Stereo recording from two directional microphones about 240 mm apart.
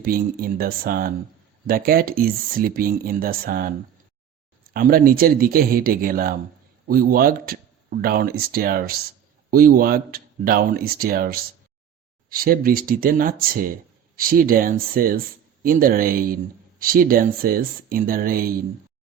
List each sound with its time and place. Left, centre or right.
0.0 s speech: right
4.7 s speech: right